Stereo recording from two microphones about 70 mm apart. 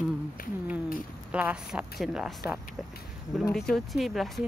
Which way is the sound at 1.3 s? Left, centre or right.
Centre.